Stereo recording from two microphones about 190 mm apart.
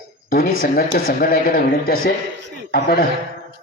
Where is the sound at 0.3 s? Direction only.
50° left (ahead or behind).